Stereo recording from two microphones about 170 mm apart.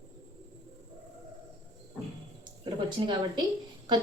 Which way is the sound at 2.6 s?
25° right (ahead or behind).